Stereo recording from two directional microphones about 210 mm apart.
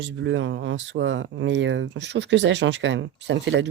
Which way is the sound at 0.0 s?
60° right (ahead or behind).